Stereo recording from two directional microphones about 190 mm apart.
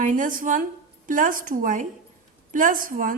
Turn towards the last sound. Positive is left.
turn(degrees=-45)  # may be behind; listen again after turning